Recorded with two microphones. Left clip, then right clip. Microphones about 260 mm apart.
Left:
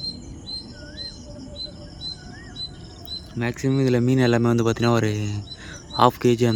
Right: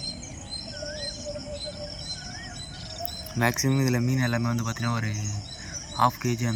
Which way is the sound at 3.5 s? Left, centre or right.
Centre.